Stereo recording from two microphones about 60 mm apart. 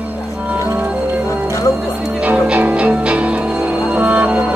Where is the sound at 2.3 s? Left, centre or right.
Right.